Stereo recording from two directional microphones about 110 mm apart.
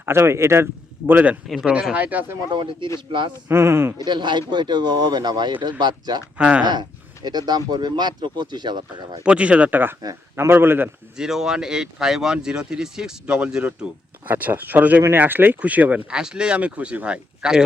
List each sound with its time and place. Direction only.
0.0 s speech: 25° right (ahead or behind)
1.5 s speech: centre (ahead or behind)
1.7 s speech: 10° right (ahead or behind)
2.5 s speech: 45° right (ahead or behind)
3.5 s speech: 25° right (ahead or behind)
3.9 s speech: 40° right (ahead or behind)
6.3 s speech: 10° right (ahead or behind)
6.6 s speech: 40° right (ahead or behind)
9.2 s speech: 10° right (ahead or behind)
11.2 s speech: 5° right (ahead or behind)